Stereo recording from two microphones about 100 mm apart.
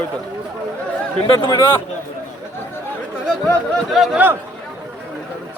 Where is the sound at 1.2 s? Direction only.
55° left (ahead or behind).